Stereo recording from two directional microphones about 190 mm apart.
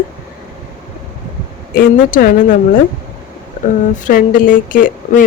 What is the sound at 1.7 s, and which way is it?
Speech, 50° left (ahead or behind).